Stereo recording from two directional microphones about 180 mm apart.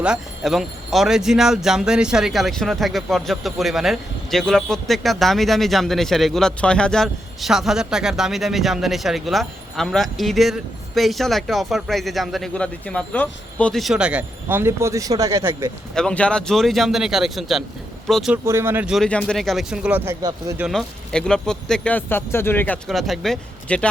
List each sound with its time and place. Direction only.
0.0 s speech: 5° right (ahead or behind)
16.0 s speech: 5° left (ahead or behind)
18.4 s speech: 15° right (ahead or behind)
20.7 s speech: 5° left (ahead or behind)